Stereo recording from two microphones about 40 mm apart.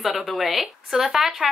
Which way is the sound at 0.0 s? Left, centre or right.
Centre.